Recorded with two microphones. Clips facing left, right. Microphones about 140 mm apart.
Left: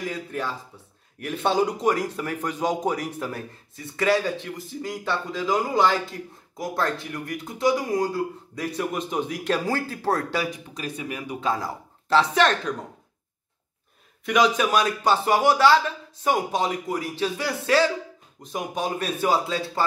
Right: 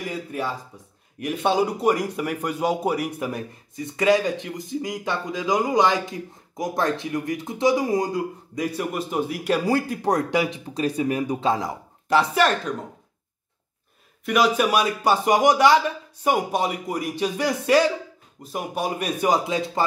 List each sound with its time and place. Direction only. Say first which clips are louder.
0.0 s a man's voice: right 1 dB; 10° right (ahead or behind)
10.7 s speech: right 9 dB; 35° right (ahead or behind)
11.5 s speech: right 3 dB; 20° right (ahead or behind)
14.2 s a man's voice: right 1 dB; 5° right (ahead or behind)